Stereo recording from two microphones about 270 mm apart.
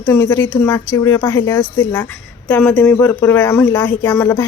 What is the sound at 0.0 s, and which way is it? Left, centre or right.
A woman's voice, centre.